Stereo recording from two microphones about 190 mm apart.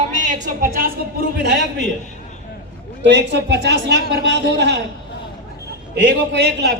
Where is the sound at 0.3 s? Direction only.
45° right (ahead or behind).